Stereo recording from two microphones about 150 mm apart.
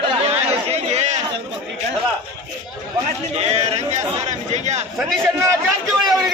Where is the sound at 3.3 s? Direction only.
45° right (ahead or behind).